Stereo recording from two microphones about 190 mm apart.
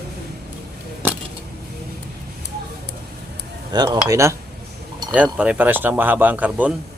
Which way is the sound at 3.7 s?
20° right (ahead or behind).